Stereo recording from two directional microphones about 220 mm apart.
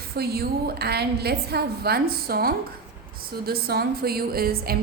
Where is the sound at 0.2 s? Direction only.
45° right (ahead or behind).